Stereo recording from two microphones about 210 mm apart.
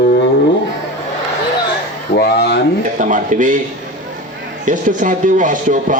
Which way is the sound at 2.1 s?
50° left (ahead or behind).